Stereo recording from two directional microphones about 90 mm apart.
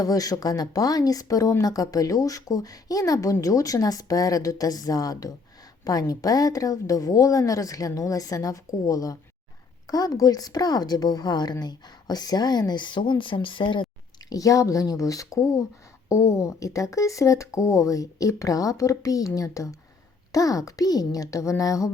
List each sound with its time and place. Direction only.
0.0 s a woman's voice: 40° left (ahead or behind); by 13.8 s 65° left (ahead or behind)
14.3 s speech: 40° left (ahead or behind)